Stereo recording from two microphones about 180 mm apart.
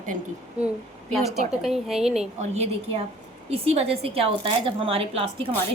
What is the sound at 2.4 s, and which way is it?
A woman's voice, 35° right (ahead or behind).